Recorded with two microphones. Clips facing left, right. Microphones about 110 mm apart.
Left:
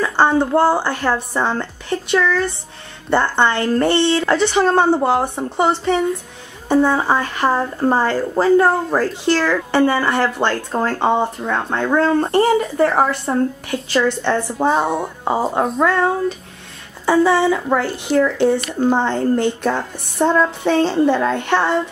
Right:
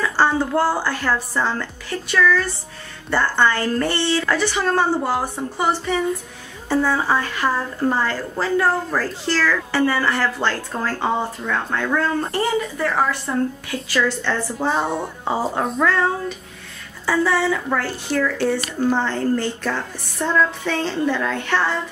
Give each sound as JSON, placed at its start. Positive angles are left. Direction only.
{"t": 0.0, "sound": "a woman's voice", "side_deg": 20}
{"t": 12.3, "sound": "speech", "side_deg": 40}
{"t": 13.7, "sound": "a woman's voice", "side_deg": 20}
{"t": 14.7, "sound": "speech", "side_deg": 5}
{"t": 17.0, "sound": "a woman's voice", "side_deg": 20}